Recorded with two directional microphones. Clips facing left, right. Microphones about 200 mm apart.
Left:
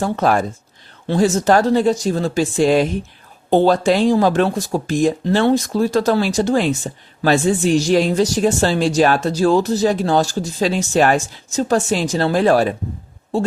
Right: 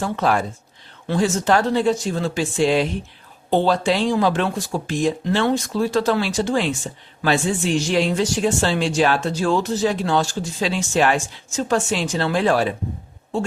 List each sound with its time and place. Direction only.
0.0 s speech: 45° left (ahead or behind)